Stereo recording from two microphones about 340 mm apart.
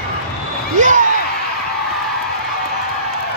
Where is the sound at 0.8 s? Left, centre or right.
Right.